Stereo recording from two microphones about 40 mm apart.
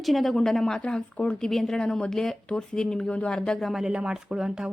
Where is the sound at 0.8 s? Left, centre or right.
Left.